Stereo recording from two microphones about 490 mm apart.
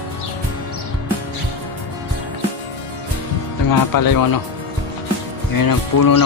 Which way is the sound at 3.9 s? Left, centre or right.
Left.